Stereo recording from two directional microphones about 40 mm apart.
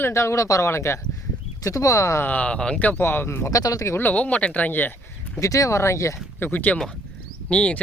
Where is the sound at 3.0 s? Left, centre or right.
Left.